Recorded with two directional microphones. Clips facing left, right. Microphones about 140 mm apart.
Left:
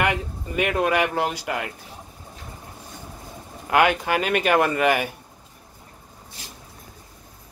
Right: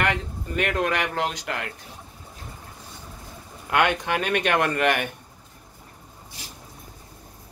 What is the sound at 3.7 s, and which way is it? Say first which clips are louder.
A man's voice: left 3 dB; 5° left (ahead or behind).